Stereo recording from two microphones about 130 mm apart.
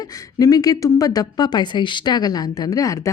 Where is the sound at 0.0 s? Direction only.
25° left (ahead or behind).